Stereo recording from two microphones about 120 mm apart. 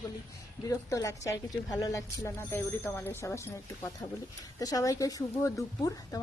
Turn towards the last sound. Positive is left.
turn(degrees=30)  # may be behind; listen again after turning